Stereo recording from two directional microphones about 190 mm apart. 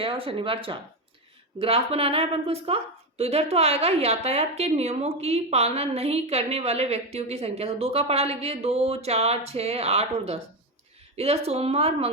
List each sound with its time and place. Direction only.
0.0 s a woman's voice: 30° right (ahead or behind)